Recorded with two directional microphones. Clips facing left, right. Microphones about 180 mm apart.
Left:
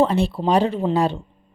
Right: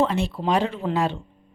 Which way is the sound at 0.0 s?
35° left (ahead or behind).